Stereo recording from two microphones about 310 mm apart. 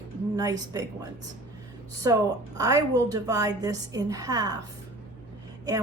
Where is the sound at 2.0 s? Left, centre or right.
Centre.